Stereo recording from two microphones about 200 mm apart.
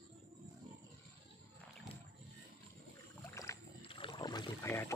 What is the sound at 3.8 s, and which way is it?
Rowboat, 25° left (ahead or behind).